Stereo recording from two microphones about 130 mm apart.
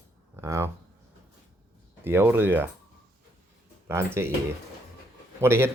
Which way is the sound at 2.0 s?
15° right (ahead or behind).